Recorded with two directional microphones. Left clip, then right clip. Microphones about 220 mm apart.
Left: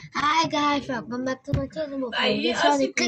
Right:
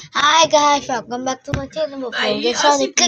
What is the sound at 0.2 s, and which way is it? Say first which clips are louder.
A woman's voice: right 9 dB; 20° left (ahead or behind).